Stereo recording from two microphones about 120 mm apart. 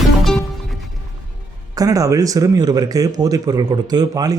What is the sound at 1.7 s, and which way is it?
Speech, 30° right (ahead or behind).